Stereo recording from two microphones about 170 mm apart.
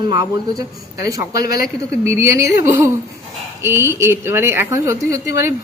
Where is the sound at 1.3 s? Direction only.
65° left (ahead or behind).